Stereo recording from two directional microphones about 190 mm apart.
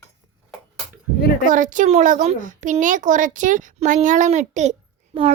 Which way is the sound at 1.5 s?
45° right (ahead or behind).